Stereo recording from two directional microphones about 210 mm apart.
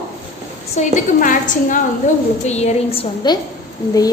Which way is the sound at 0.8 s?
40° left (ahead or behind).